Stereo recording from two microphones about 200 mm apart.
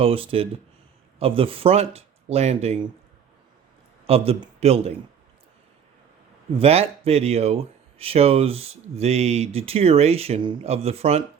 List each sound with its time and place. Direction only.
0.0 s speech: 30° right (ahead or behind)
4.0 s a man's voice: 30° right (ahead or behind)
6.6 s speech: 30° right (ahead or behind)